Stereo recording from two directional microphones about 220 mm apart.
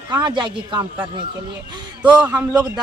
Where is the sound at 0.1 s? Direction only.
20° right (ahead or behind).